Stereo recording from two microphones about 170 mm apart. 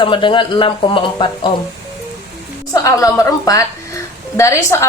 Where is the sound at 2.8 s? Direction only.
20° left (ahead or behind).